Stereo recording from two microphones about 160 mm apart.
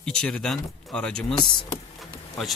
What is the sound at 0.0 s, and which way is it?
Speech, 5° left (ahead or behind).